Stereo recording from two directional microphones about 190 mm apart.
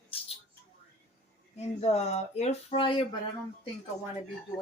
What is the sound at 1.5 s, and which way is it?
Speech, 35° left (ahead or behind).